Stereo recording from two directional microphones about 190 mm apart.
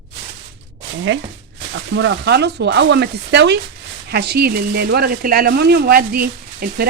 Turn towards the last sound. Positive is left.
turn(degrees=-55)  # may be behind; listen again after turning